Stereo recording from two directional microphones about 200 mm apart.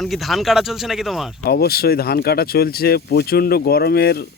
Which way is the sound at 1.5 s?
50° left (ahead or behind).